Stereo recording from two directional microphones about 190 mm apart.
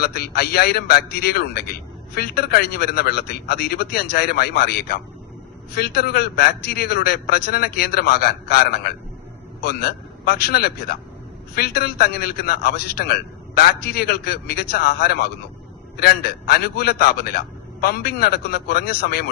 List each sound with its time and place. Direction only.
0.0 s a man's voice: 55° left (ahead or behind)